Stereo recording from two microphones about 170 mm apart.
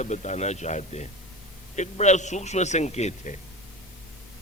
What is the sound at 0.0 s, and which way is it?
A man's voice, 45° left (ahead or behind).